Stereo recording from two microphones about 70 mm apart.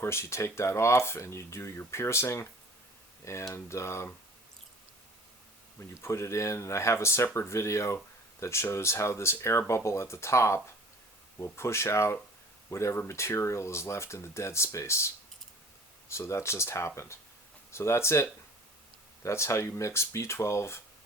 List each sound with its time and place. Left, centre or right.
0.0 s speech: left
3.5 s speech: left
6.0 s speech: left